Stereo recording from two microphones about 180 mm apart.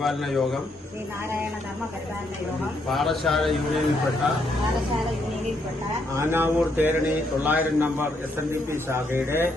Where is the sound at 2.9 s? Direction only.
Centre (ahead or behind).